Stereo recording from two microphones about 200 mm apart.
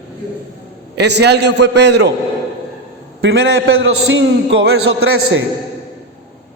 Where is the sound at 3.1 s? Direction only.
60° right (ahead or behind).